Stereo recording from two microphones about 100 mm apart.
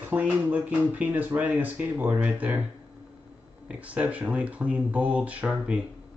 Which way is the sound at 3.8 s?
15° right (ahead or behind).